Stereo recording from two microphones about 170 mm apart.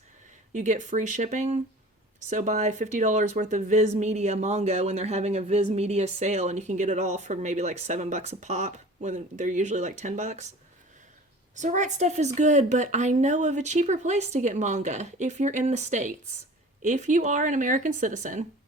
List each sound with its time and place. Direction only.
0.5 s a woman's voice: 45° right (ahead or behind)
11.5 s a woman's voice: 45° right (ahead or behind)